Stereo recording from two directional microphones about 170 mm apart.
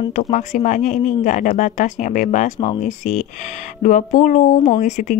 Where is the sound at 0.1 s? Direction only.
45° left (ahead or behind).